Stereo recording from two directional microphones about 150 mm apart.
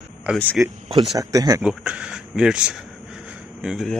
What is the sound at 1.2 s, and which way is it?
Speech, 20° right (ahead or behind).